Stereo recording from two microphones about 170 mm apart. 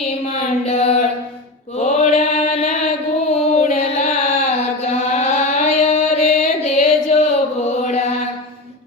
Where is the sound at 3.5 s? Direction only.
40° left (ahead or behind).